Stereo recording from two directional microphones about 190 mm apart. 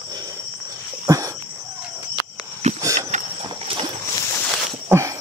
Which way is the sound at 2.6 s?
35° right (ahead or behind).